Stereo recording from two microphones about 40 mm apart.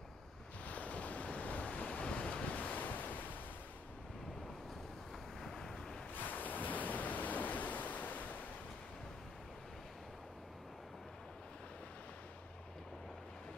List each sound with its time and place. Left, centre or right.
0.7 s waves: left
5.4 s vehicle: centre
6.1 s ocean: left